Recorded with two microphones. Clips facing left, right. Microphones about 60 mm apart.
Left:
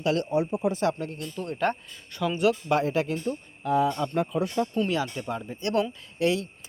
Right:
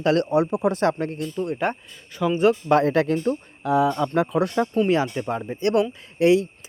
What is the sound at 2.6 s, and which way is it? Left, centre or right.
Speech, right.